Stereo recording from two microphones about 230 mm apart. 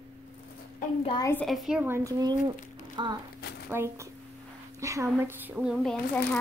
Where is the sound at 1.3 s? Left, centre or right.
Centre.